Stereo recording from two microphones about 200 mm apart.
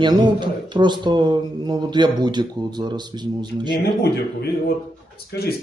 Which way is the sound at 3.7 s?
55° left (ahead or behind).